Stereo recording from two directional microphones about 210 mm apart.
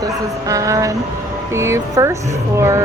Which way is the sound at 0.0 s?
15° right (ahead or behind).